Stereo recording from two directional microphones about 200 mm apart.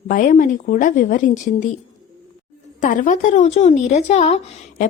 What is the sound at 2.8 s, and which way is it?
Speech, 40° left (ahead or behind).